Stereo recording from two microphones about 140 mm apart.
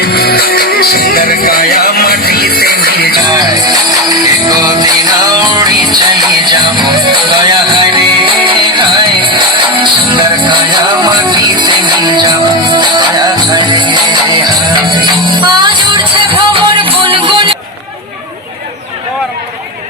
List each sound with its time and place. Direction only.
0.0 s music: 90° left
3.2 s music: 30° right (ahead or behind)